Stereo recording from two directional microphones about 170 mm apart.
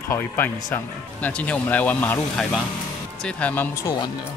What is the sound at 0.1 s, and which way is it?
Speech, 15° left (ahead or behind).